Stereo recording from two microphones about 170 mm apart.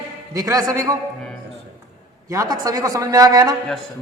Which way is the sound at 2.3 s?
20° right (ahead or behind).